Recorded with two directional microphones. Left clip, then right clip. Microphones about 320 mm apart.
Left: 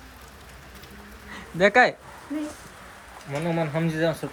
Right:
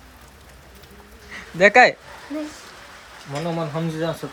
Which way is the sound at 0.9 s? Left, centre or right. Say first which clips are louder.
Right 4 dB; centre.